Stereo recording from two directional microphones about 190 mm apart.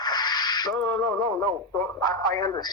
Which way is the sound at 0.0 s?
20° left (ahead or behind).